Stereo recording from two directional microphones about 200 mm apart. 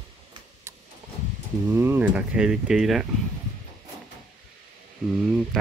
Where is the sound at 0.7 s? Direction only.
15° right (ahead or behind).